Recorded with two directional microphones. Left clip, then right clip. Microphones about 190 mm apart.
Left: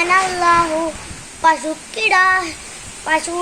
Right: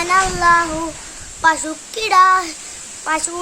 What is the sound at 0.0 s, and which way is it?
Speech, 15° right (ahead or behind).